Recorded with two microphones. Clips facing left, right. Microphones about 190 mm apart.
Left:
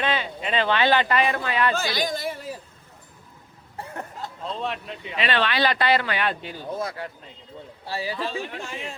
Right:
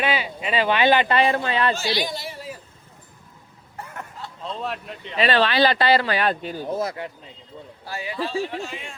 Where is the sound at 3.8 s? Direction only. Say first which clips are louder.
Left 2 dB; 30° left (ahead or behind).